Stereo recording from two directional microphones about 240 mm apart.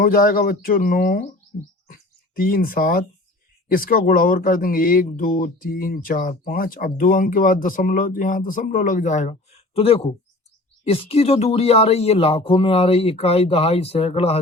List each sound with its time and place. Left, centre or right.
0.0 s speech: left